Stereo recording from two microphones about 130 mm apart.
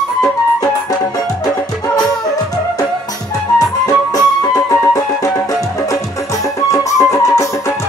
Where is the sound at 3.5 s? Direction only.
30° left (ahead or behind).